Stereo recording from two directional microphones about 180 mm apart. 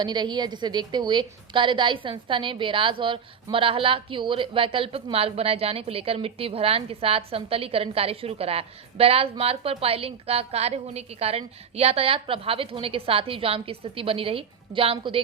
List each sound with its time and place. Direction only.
0.0 s a woman's voice: 25° right (ahead or behind)